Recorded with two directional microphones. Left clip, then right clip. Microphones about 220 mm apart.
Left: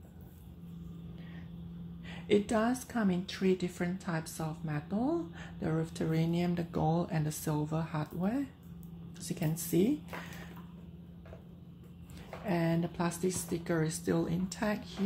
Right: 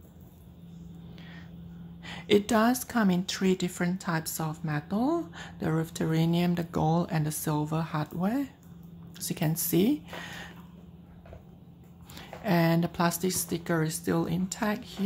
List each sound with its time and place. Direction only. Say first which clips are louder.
2.0 s speech: right 5 dB; 20° right (ahead or behind)
12.4 s speech: right 7 dB; 20° right (ahead or behind)